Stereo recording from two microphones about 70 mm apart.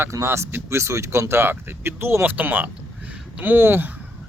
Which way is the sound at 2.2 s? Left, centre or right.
Right.